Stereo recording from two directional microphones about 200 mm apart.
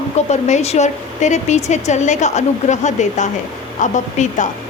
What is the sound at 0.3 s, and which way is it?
A woman's voice, 35° left (ahead or behind).